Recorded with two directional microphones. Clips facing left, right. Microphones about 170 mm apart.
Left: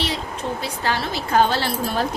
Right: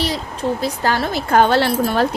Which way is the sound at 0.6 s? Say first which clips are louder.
Right 3 dB; 45° right (ahead or behind).